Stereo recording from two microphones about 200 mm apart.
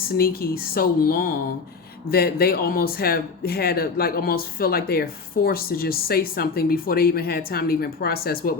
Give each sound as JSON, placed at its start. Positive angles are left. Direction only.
{"t": 0.0, "sound": "speech", "side_deg": 50}